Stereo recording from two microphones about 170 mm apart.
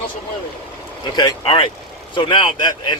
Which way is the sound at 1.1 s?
30° left (ahead or behind).